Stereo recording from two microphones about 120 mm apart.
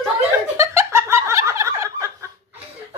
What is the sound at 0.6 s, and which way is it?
Turkey, 25° right (ahead or behind).